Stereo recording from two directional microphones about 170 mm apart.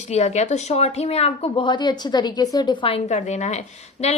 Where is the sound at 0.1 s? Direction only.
40° left (ahead or behind).